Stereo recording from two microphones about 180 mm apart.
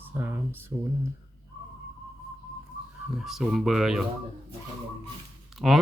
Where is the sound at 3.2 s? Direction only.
5° right (ahead or behind).